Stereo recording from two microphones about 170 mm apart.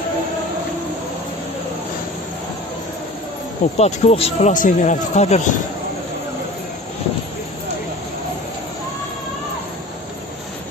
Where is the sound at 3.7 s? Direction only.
35° left (ahead or behind).